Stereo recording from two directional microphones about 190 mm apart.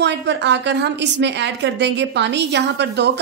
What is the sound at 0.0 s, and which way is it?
A woman's voice, 65° right (ahead or behind).